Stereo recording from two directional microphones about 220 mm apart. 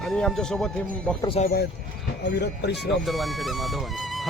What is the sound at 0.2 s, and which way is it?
Speech, 5° left (ahead or behind).